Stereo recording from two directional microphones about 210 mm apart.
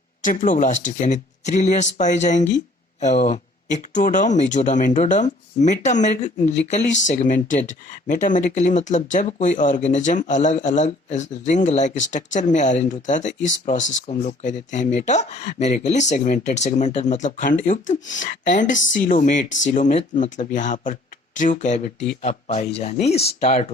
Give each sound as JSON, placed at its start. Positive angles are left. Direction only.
{"t": 0.2, "sound": "speech", "side_deg": 35}